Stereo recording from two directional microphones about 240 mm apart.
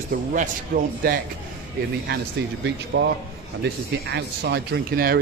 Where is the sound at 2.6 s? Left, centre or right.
Right.